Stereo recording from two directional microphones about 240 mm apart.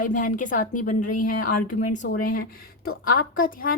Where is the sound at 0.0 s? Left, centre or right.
Left.